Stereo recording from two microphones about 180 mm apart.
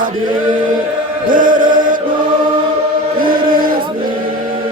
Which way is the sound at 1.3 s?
50° right (ahead or behind).